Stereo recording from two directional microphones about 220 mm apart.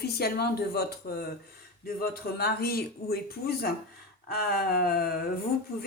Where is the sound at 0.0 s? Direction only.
45° left (ahead or behind).